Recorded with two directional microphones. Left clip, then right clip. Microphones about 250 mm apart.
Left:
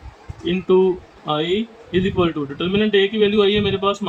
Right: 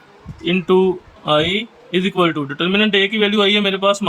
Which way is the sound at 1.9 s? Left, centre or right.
Right.